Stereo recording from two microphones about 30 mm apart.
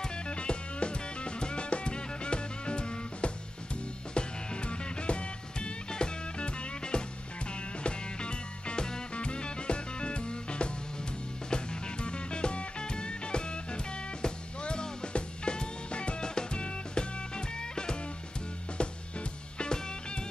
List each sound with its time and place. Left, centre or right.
0.3 s music: left
9.1 s music: left
19.6 s music: left